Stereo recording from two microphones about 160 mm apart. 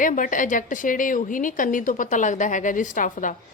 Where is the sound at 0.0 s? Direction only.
55° left (ahead or behind).